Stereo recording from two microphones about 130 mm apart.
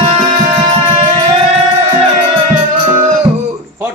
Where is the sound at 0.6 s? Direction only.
45° right (ahead or behind).